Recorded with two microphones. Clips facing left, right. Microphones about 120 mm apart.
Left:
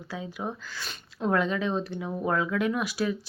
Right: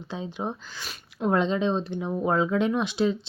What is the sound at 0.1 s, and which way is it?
Speech, 25° right (ahead or behind).